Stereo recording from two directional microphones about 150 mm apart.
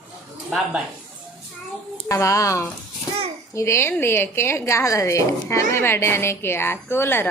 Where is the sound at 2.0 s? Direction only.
20° left (ahead or behind).